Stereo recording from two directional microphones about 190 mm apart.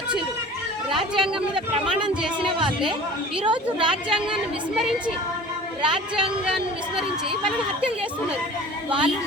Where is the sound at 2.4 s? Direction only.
25° right (ahead or behind).